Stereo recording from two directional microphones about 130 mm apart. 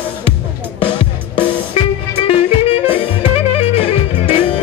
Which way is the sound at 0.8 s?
45° left (ahead or behind).